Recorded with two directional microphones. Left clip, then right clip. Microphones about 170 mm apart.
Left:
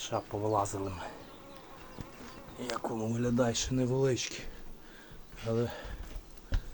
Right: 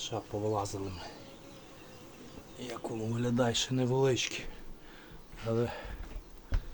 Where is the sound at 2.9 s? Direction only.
10° left (ahead or behind).